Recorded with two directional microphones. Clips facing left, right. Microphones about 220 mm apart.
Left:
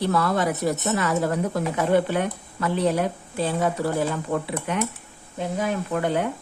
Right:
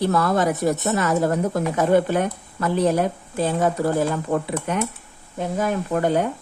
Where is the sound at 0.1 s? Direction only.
45° right (ahead or behind).